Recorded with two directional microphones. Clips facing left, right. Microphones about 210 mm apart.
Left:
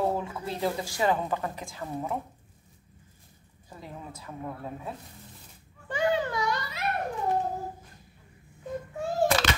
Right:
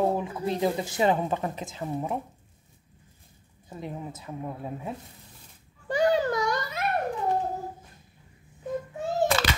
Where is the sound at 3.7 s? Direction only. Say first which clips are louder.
Right 6 dB; 20° right (ahead or behind).